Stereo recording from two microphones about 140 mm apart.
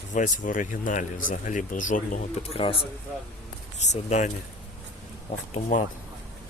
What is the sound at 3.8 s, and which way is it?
Speech, 55° left (ahead or behind).